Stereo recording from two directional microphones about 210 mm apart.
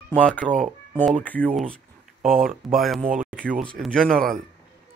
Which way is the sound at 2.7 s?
Centre (ahead or behind).